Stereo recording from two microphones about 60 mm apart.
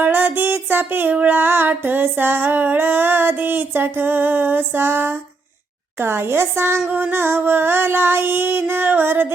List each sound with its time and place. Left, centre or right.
0.0 s music: right
1.1 s female singing: right
6.0 s a woman's voice: right
7.1 s female singing: right